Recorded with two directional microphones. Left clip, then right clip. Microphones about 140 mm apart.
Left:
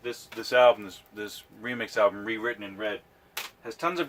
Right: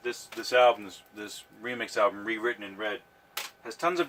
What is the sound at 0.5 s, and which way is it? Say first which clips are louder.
Speech: left 2 dB; 55° left (ahead or behind).